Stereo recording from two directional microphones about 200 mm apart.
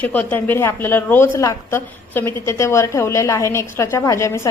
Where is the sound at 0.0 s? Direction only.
10° left (ahead or behind).